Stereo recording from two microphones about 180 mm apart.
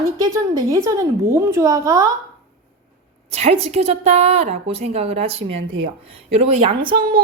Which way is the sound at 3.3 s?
35° right (ahead or behind).